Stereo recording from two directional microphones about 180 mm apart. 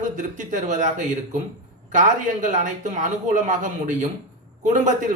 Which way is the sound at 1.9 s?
45° right (ahead or behind).